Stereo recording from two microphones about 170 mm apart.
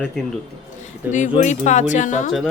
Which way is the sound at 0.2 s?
Centre (ahead or behind).